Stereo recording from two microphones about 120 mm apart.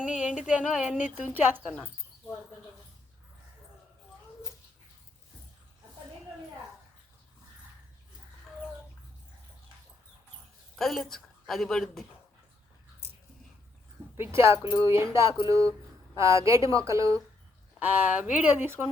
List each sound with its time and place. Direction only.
0.0 s speech: 10° right (ahead or behind)
1.7 s cricket: 15° left (ahead or behind)
10.8 s a woman's voice: centre (ahead or behind)
14.2 s a woman's voice: 20° right (ahead or behind)
17.7 s speech: 15° right (ahead or behind)